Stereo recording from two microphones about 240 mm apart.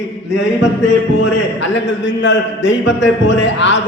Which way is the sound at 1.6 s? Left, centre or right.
Left.